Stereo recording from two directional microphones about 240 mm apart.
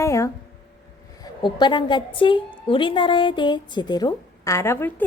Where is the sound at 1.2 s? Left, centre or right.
Centre.